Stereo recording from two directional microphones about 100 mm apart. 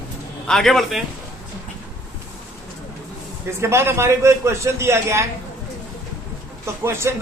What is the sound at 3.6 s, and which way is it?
Speech, 25° right (ahead or behind).